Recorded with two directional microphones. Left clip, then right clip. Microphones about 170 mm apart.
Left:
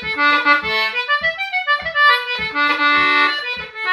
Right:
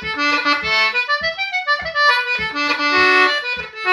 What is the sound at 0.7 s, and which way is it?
Accordion, 30° right (ahead or behind).